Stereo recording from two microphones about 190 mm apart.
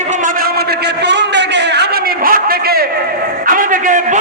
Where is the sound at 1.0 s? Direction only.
65° right (ahead or behind).